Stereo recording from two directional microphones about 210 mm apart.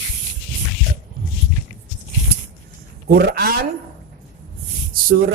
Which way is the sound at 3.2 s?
50° right (ahead or behind).